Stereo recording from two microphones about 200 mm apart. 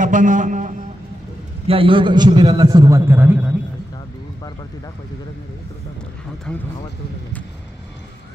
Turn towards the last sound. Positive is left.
turn(degrees=5)  # may be behind; listen again after turning